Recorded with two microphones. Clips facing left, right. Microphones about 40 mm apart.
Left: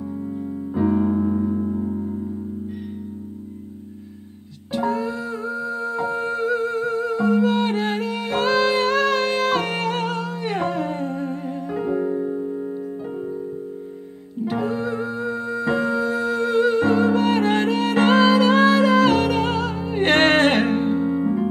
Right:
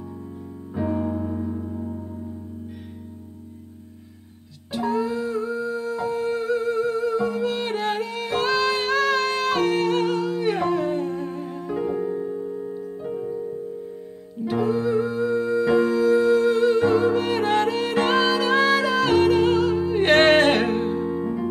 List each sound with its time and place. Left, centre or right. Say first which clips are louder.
0.7 s music: left 5 dB; centre
5.0 s music: right 1 dB; centre
14.4 s music: right 1 dB; centre
20.4 s music: left 2 dB; left